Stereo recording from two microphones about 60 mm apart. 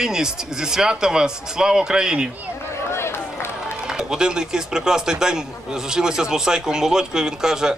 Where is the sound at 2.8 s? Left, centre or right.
Left.